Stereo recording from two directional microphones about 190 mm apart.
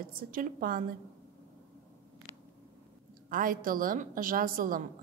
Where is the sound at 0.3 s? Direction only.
45° right (ahead or behind).